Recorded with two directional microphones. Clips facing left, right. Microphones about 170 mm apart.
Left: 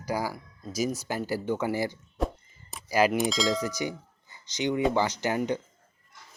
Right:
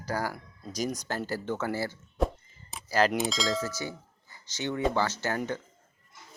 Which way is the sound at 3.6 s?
15° left (ahead or behind).